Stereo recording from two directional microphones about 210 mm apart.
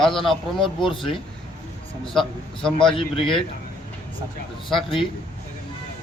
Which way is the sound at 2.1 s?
Centre (ahead or behind).